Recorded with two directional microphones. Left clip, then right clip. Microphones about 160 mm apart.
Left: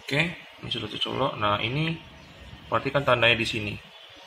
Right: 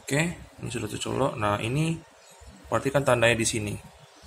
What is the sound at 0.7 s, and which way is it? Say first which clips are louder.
Speech: left 3 dB; 20° right (ahead or behind).